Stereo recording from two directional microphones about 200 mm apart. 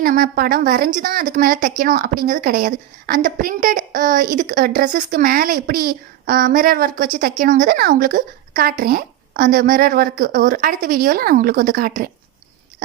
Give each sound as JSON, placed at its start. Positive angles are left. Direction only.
{"t": 0.0, "sound": "a woman's voice", "side_deg": -50}